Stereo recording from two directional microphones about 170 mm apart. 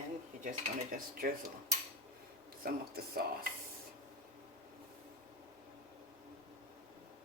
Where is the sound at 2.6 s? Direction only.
60° right (ahead or behind).